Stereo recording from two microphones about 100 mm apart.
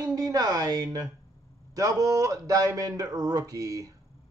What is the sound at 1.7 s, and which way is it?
Speech, 35° right (ahead or behind).